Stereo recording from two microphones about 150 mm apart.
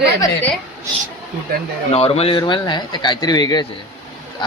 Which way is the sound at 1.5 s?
90° right.